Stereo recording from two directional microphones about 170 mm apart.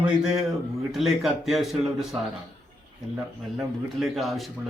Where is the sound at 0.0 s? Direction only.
Centre (ahead or behind).